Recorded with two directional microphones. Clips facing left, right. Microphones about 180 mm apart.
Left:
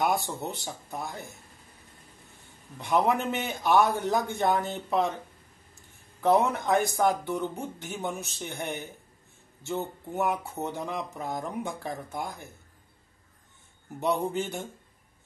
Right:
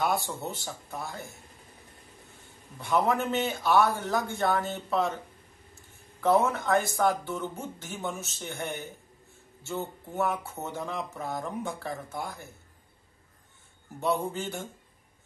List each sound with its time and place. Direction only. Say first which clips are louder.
0.0 s speech: left 1 dB; 20° left (ahead or behind)
2.8 s speech: left 1 dB; 20° left (ahead or behind)
6.2 s speech: left 1 dB; 15° left (ahead or behind)
13.9 s speech: left 2 dB; 20° left (ahead or behind)